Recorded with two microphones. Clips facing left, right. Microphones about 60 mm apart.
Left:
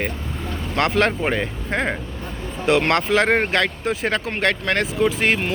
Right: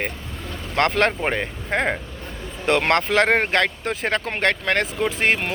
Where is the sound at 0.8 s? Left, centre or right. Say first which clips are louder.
Even; right.